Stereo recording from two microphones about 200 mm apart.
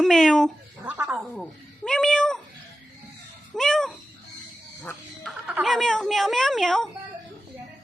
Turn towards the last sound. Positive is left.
turn(degrees=0)  # may be behind; listen again after turning